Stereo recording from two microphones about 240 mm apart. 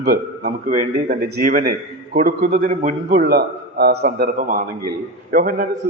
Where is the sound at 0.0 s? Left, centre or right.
Right.